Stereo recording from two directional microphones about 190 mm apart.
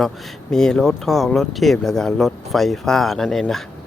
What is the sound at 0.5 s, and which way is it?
Speech, 5° left (ahead or behind).